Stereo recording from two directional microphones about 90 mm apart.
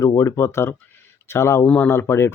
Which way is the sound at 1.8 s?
30° left (ahead or behind).